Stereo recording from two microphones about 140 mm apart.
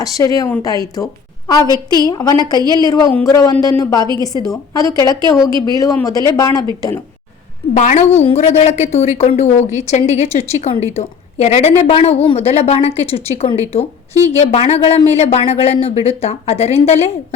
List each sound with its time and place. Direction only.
0.0 s a woman's voice: 25° left (ahead or behind)
2.6 s a woman's voice: 30° right (ahead or behind)
2.8 s speech: 25° left (ahead or behind)
5.5 s speech: 30° right (ahead or behind)
6.1 s speech: 25° left (ahead or behind)
7.7 s a woman's voice: 60° left (ahead or behind)